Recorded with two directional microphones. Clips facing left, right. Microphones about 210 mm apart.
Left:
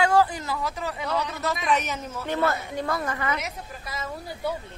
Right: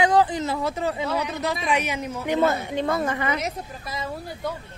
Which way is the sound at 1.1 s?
15° right (ahead or behind).